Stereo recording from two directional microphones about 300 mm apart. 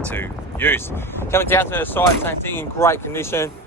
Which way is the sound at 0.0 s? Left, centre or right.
Centre.